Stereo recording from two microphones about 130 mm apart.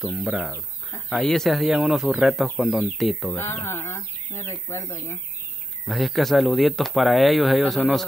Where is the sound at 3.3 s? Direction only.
20° left (ahead or behind).